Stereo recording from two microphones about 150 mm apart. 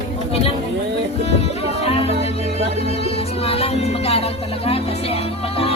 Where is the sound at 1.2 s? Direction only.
45° left (ahead or behind).